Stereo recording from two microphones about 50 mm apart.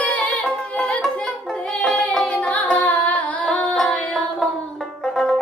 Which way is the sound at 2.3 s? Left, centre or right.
Left.